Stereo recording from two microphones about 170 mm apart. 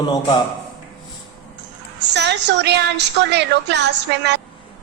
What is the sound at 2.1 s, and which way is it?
A woman's voice, 90° right.